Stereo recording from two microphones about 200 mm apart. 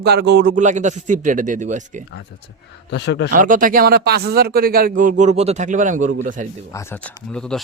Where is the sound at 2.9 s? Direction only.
60° left (ahead or behind).